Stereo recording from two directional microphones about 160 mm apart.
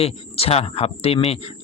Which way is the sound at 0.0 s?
40° left (ahead or behind).